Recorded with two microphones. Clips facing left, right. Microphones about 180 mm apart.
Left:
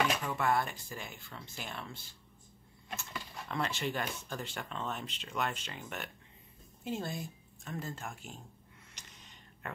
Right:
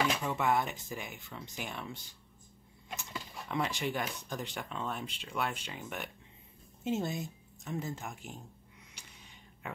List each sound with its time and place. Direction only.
0.3 s speech: 20° right (ahead or behind)
3.0 s speech: 15° right (ahead or behind)
6.8 s speech: 20° right (ahead or behind)
8.9 s a sound: 10° right (ahead or behind)